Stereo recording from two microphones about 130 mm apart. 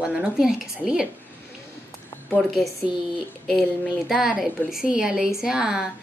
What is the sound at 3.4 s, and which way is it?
A woman's voice, centre (ahead or behind).